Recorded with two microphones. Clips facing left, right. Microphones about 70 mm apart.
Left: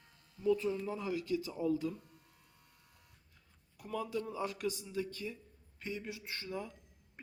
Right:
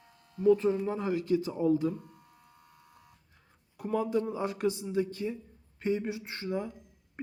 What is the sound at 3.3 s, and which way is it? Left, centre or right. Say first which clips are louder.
A man's voice: right 7 dB; right.